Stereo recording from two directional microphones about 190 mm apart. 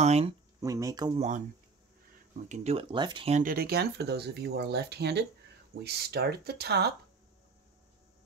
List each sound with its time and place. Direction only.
0.0 s speech: 35° right (ahead or behind)
0.6 s speech: 15° right (ahead or behind)
2.4 s speech: 35° right (ahead or behind)
3.3 s speech: 50° right (ahead or behind)